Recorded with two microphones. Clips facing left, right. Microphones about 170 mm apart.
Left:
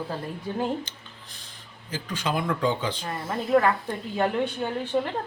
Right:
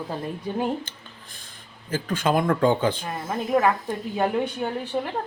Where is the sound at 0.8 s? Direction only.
50° right (ahead or behind).